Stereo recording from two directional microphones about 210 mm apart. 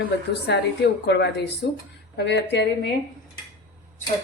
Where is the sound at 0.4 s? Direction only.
55° left (ahead or behind).